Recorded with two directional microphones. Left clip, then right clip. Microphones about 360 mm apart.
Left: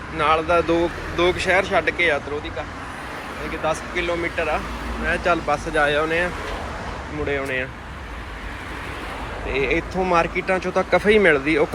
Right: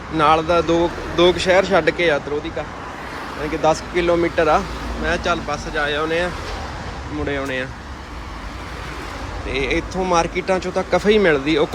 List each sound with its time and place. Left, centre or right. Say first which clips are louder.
0.2 s speech: right 3 dB; centre
3.6 s speech: right 6 dB; centre
7.3 s speech: even; centre
9.5 s speech: even; centre